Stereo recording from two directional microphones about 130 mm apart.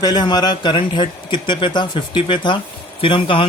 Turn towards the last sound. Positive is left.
turn(degrees=45)  # may be behind; listen again after turning